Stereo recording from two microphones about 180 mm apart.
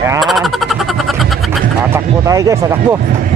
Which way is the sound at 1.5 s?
15° right (ahead or behind).